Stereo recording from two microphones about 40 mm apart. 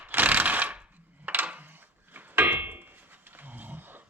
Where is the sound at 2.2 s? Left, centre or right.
Right.